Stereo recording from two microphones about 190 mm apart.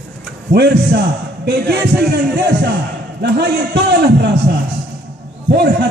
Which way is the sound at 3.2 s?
60° right (ahead or behind).